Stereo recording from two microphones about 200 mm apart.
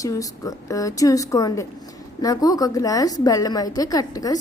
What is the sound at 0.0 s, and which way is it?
A woman's voice, 15° left (ahead or behind).